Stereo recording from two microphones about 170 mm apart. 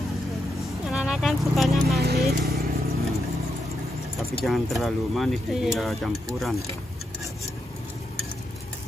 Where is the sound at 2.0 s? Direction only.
70° right (ahead or behind).